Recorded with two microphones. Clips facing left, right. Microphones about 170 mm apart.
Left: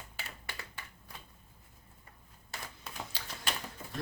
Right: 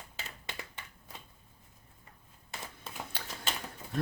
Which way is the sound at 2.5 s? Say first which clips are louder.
Right 1 dB; 20° right (ahead or behind).